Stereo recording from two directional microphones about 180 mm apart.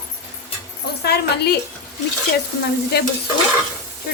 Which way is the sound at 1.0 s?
65° left (ahead or behind).